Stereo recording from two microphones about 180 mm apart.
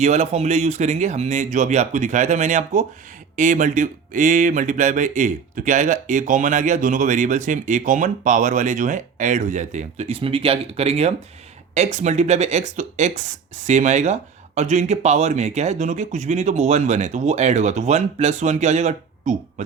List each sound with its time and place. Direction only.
0.0 s speech: 40° right (ahead or behind)